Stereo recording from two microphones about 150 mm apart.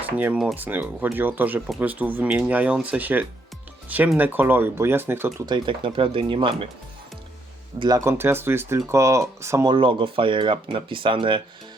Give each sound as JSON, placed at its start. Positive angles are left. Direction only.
{"t": 0.3, "sound": "speech", "side_deg": -10}
{"t": 5.5, "sound": "speech", "side_deg": -30}
{"t": 7.8, "sound": "speech", "side_deg": -25}
{"t": 9.7, "sound": "speech", "side_deg": -35}